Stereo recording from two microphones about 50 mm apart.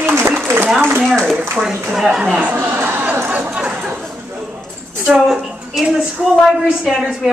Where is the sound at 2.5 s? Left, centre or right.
Right.